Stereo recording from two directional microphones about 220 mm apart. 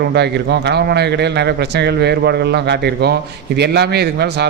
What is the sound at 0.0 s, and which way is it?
A man's voice, 50° right (ahead or behind).